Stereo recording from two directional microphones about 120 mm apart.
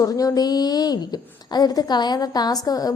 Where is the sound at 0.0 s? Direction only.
30° left (ahead or behind).